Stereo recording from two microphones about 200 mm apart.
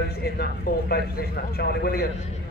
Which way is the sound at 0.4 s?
55° left (ahead or behind).